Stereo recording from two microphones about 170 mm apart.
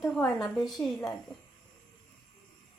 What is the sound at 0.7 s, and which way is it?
Speech, centre (ahead or behind).